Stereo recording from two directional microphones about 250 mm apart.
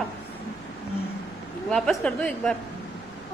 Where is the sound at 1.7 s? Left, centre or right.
Centre.